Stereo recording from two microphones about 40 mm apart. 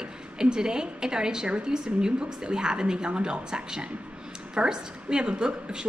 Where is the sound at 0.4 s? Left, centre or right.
Centre.